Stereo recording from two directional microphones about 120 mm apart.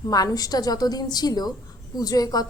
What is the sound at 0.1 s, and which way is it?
A woman's voice, 30° left (ahead or behind).